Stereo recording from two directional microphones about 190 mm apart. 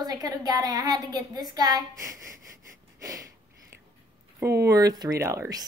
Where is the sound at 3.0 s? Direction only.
15° right (ahead or behind).